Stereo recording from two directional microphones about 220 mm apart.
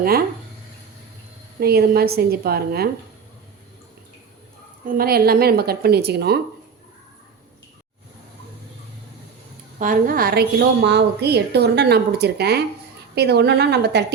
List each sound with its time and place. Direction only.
1.5 s a woman's voice: 45° right (ahead or behind)
4.9 s a woman's voice: 45° right (ahead or behind)
9.7 s a woman's voice: 35° right (ahead or behind)